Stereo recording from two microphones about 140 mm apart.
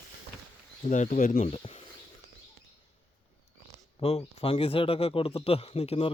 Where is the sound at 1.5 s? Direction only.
45° left (ahead or behind).